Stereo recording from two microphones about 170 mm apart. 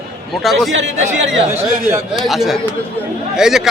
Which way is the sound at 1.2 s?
90° right.